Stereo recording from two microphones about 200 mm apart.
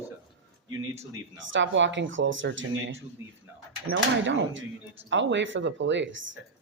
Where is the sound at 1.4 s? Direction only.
65° right (ahead or behind).